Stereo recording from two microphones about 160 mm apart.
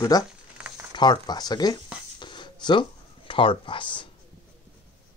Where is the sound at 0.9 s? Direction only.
30° left (ahead or behind).